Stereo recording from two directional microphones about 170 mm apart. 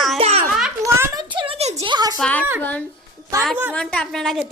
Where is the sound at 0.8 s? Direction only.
20° right (ahead or behind); by 1.9 s 40° right (ahead or behind).